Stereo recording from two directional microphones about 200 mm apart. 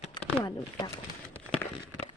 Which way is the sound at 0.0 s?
30° left (ahead or behind).